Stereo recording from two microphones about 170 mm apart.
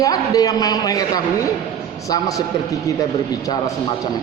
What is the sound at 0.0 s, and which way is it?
A man's voice, 20° left (ahead or behind).